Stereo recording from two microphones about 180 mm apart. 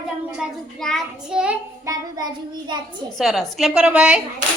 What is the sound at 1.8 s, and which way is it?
Child singing, 20° right (ahead or behind).